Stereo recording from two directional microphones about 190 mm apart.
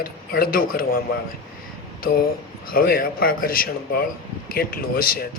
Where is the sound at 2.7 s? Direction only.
50° left (ahead or behind).